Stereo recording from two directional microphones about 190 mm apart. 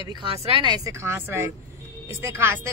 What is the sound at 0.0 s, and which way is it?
Speech, 25° right (ahead or behind).